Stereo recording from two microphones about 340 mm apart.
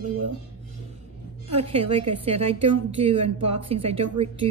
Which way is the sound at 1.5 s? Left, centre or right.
Centre.